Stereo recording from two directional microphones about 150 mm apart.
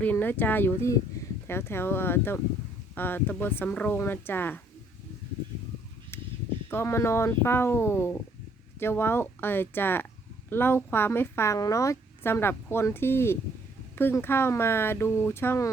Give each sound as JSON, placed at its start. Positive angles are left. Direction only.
{"t": 0.0, "sound": "a woman's voice", "side_deg": 10}
{"t": 6.7, "sound": "a woman's voice", "side_deg": 15}